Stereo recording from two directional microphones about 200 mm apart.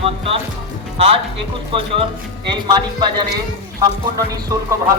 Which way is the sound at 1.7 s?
25° right (ahead or behind).